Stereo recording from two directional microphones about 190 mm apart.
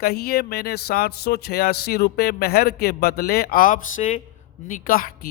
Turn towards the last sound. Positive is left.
turn(degrees=50)  # may be behind; listen again after turning